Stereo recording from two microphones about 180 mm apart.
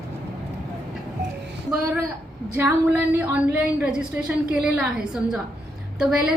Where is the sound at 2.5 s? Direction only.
15° right (ahead or behind).